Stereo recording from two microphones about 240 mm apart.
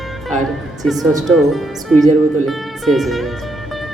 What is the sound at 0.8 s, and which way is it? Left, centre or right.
Speech, centre.